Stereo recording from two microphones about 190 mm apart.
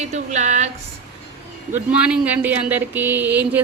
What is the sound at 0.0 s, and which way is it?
Speech, 35° right (ahead or behind).